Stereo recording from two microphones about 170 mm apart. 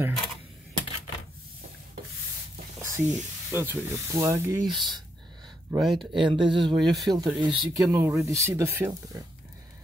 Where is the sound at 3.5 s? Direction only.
15° right (ahead or behind).